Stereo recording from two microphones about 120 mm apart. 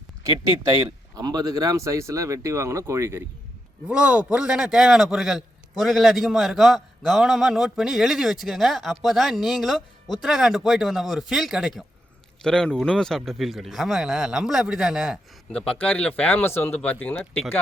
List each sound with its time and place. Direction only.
0.9 s speech: 35° right (ahead or behind)
3.8 s a man's voice: 10° right (ahead or behind)
15.5 s speech: 10° left (ahead or behind)